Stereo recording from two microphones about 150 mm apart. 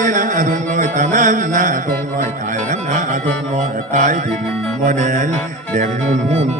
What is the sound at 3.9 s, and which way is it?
Music, 60° right (ahead or behind).